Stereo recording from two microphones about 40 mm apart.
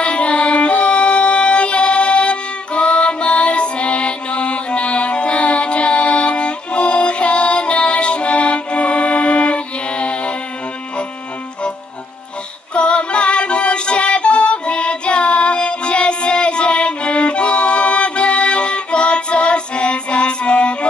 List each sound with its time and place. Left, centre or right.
0.0 s music: left
12.7 s music: left